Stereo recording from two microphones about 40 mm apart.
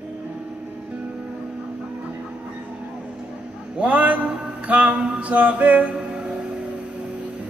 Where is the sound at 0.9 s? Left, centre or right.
Right.